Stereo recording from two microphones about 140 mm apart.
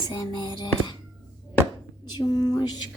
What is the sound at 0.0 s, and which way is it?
Music, 30° left (ahead or behind).